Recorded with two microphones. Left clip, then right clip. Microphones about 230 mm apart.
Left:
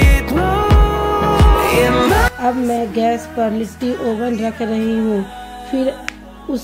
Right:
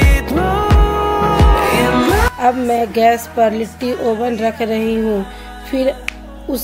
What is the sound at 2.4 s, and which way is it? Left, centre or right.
A woman's voice, right.